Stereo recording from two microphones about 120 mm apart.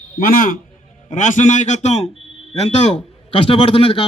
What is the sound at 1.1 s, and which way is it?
Speech, 90° left.